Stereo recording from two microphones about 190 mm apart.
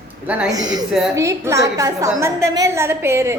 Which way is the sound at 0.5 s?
20° right (ahead or behind).